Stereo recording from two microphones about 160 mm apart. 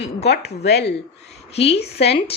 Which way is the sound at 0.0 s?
90° left.